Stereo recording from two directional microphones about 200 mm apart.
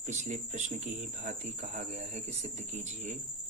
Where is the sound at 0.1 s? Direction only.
35° right (ahead or behind).